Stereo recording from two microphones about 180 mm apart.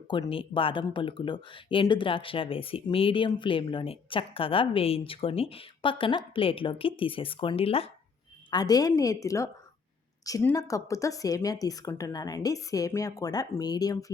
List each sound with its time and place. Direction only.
0.1 s speech: 30° left (ahead or behind)
8.4 s speech: 20° left (ahead or behind)